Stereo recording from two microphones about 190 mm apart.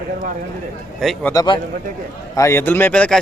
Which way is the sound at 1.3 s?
20° left (ahead or behind).